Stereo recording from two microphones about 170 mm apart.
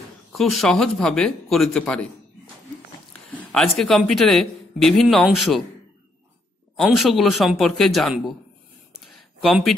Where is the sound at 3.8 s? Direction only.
Centre (ahead or behind).